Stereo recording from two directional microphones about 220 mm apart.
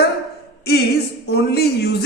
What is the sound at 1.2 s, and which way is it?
Speech, 45° left (ahead or behind).